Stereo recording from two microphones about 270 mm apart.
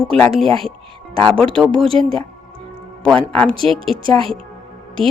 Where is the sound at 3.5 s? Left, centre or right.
Centre.